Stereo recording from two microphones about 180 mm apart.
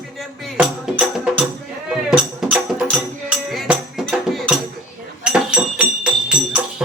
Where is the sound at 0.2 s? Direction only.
5° right (ahead or behind).